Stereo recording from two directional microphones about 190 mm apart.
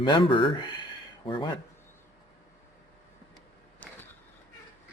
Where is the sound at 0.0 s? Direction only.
25° left (ahead or behind).